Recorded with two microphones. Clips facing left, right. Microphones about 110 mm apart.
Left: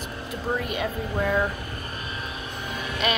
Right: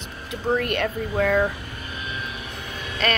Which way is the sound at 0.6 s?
5° left (ahead or behind).